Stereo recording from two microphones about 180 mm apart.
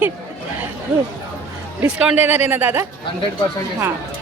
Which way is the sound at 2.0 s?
5° right (ahead or behind).